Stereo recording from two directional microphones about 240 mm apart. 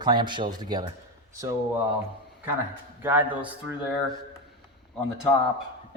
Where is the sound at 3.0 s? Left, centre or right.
Centre.